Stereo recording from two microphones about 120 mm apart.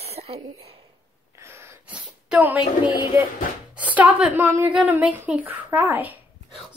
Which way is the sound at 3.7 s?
15° right (ahead or behind).